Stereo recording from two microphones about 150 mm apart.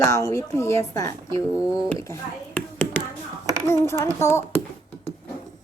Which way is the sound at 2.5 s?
10° left (ahead or behind).